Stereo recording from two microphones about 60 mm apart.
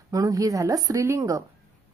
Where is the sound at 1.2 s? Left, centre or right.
Right.